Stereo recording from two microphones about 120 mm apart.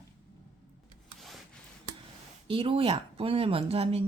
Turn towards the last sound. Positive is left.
turn(degrees=-55)  # may be behind; listen again after turning